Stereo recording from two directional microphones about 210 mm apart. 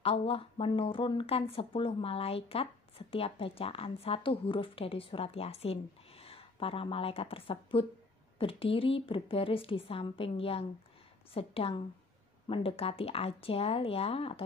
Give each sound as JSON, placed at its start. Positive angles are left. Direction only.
{"t": 0.0, "sound": "speech", "side_deg": 25}